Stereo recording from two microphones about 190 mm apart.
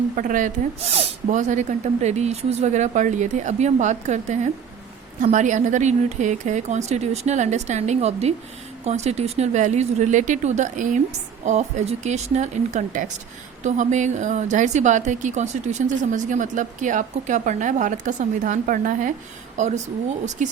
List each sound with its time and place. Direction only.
0.2 s a woman's voice: 45° right (ahead or behind)